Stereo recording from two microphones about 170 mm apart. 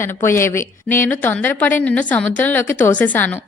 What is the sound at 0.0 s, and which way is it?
A woman's voice, 15° left (ahead or behind).